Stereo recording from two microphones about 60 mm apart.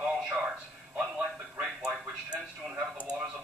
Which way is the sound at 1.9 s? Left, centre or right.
Centre.